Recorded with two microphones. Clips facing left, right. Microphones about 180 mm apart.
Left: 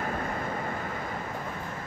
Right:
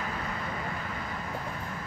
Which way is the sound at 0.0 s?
50° left (ahead or behind).